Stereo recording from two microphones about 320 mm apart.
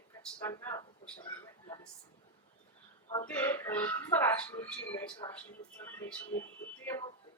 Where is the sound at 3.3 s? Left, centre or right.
Centre.